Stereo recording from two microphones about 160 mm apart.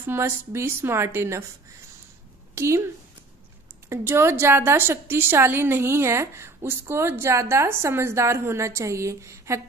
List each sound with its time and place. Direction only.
0.0 s a woman's voice: 15° right (ahead or behind)
2.5 s speech: 15° right (ahead or behind)
3.9 s a woman's voice: 15° right (ahead or behind)